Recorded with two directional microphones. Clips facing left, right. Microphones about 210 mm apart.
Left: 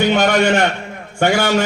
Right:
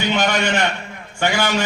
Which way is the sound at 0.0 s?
50° left (ahead or behind).